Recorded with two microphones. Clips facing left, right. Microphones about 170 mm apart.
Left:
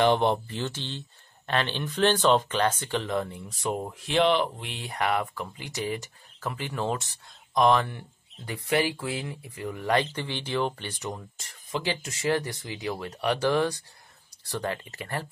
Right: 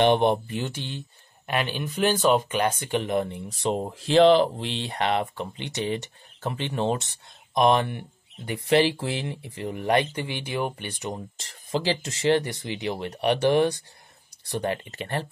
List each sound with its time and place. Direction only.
0.0 s speech: 20° right (ahead or behind)
11.1 s speech: 30° right (ahead or behind)